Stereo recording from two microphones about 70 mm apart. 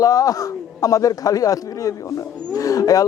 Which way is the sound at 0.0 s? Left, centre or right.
Left.